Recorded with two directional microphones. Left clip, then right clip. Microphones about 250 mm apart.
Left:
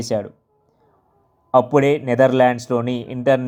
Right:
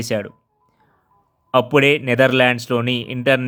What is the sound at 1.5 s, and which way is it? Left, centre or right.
A man's voice, right.